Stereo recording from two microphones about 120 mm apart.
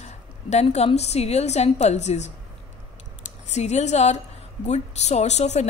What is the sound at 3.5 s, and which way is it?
Speech, 70° left (ahead or behind).